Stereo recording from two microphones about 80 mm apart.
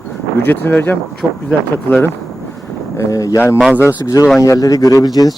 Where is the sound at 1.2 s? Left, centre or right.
Centre.